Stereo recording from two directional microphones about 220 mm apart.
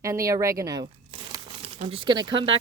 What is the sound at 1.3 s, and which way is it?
Crumpling, 25° right (ahead or behind).